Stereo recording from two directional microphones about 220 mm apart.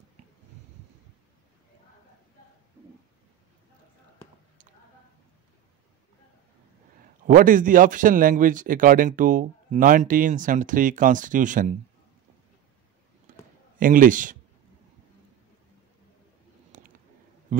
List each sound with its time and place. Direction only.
7.2 s speech: 40° right (ahead or behind)
13.7 s speech: 40° right (ahead or behind)
16.7 s a sound: 40° right (ahead or behind)